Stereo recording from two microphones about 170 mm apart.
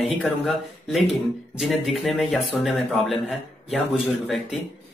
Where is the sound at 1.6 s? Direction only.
Centre (ahead or behind).